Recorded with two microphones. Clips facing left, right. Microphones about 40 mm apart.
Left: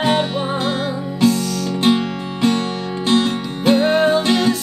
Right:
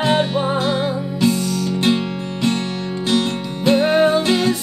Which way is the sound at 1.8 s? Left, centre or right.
Centre.